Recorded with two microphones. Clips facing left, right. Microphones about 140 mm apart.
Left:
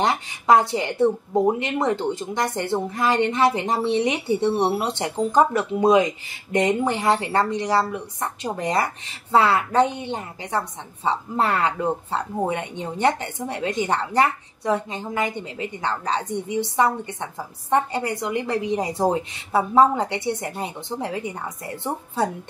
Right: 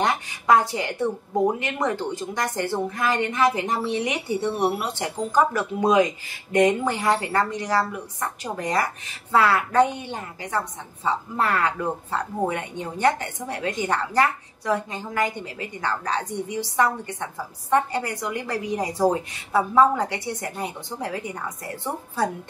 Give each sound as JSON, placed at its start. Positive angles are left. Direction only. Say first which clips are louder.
{"t": 0.0, "sound": "speech", "louder": "left 1 dB", "side_deg": 25}